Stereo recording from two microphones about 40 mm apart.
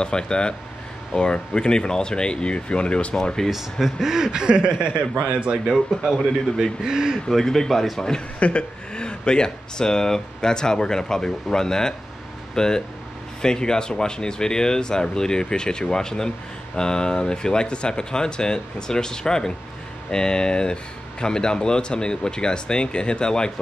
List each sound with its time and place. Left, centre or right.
0.0 s speech: left
3.2 s speech: centre
3.4 s speech: centre; by 5.0 s right
5.7 s speech: centre
6.8 s speech: centre
7.2 s speech: centre
8.4 s speech: left